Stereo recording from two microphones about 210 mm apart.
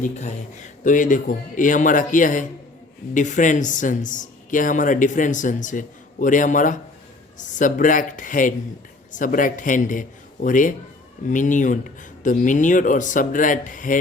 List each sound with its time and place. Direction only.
0.0 s speech: 35° left (ahead or behind)